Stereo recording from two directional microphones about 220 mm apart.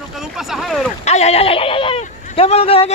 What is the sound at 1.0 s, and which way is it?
Speech, 30° left (ahead or behind).